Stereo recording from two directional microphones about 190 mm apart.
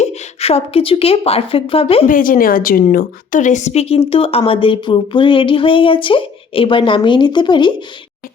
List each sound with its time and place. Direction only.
0.0 s a woman's voice: 35° left (ahead or behind)
2.0 s a woman's voice: 45° left (ahead or behind); by 7.7 s 25° left (ahead or behind)